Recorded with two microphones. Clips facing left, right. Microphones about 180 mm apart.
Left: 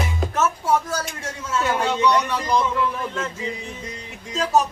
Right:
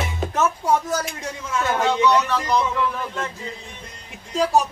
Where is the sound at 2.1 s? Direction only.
10° left (ahead or behind).